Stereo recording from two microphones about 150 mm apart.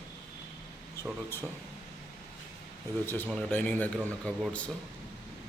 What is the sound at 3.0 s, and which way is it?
A man's voice, 15° left (ahead or behind).